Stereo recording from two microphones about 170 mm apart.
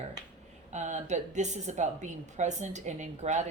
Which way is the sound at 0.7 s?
45° right (ahead or behind).